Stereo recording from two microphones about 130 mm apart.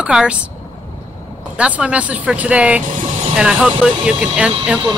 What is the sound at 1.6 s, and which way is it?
Speech, 10° right (ahead or behind).